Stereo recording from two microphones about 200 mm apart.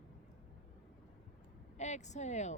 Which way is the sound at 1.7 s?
35° left (ahead or behind).